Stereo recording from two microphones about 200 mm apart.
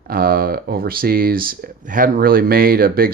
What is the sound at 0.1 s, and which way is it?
Speech, 45° right (ahead or behind).